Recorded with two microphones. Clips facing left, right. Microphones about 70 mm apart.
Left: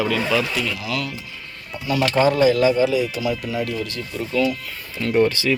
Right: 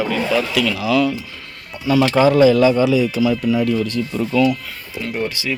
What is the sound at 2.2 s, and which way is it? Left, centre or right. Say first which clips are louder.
Speech: right 2 dB; right.